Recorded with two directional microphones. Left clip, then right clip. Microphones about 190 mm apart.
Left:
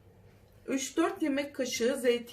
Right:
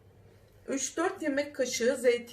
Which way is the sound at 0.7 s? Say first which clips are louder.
Left 1 dB; 40° left (ahead or behind).